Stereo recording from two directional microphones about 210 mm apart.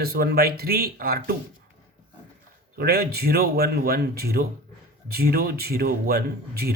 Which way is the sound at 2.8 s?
45° right (ahead or behind).